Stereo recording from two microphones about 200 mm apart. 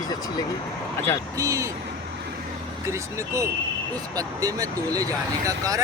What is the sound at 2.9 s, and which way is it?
Speech, 15° right (ahead or behind).